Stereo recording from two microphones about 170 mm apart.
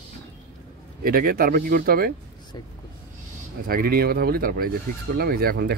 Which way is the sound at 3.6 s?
60° right (ahead or behind).